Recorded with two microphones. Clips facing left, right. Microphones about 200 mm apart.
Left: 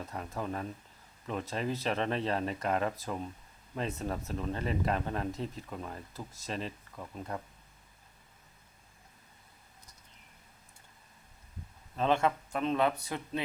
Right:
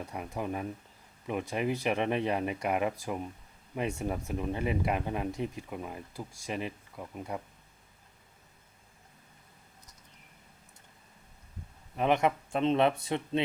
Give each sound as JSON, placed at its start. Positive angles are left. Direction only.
{"t": 0.0, "sound": "speech", "side_deg": -15}
{"t": 11.9, "sound": "speech", "side_deg": -15}